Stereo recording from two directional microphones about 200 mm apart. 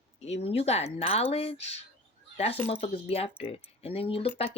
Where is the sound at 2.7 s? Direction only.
30° left (ahead or behind).